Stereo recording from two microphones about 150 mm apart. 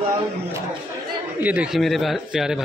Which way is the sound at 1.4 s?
5° right (ahead or behind).